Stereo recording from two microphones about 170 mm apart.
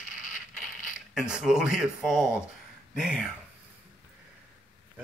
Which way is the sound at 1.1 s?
5° right (ahead or behind).